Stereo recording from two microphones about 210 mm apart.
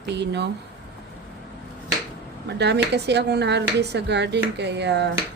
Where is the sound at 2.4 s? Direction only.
55° right (ahead or behind).